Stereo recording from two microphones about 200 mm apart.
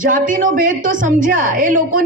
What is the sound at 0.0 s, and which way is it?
A woman's voice, 40° right (ahead or behind).